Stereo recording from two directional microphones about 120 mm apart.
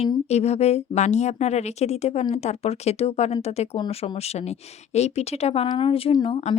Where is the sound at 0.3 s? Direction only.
65° left (ahead or behind).